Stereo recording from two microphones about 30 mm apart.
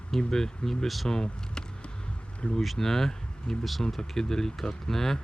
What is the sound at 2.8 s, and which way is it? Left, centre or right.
Speech, centre.